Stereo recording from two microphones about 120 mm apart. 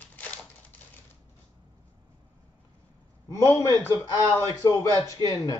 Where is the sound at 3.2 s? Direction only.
25° left (ahead or behind).